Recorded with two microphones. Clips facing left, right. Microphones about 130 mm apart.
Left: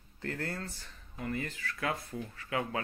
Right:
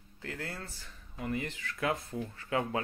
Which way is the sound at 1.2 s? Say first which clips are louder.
Right 1 dB; 20° right (ahead or behind).